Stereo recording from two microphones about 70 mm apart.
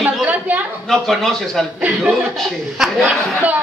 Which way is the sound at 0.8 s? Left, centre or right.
Centre.